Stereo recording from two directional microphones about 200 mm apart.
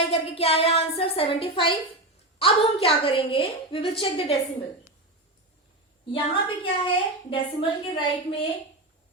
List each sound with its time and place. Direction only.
0.1 s a woman's voice: 30° left (ahead or behind)
6.1 s a woman's voice: 25° left (ahead or behind)